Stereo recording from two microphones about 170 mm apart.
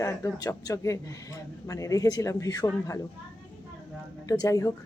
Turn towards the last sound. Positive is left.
turn(degrees=20)  # may be behind; listen again after turning